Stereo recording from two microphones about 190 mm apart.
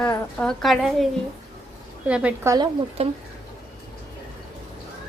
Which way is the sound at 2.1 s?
5° right (ahead or behind).